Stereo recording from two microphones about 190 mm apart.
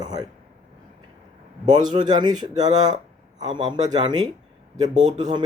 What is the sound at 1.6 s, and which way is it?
Speech, 20° right (ahead or behind).